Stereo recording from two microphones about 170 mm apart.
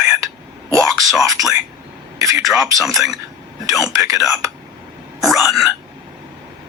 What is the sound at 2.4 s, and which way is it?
Speech, centre (ahead or behind).